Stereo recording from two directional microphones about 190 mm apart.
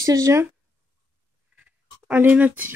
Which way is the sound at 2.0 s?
10° right (ahead or behind).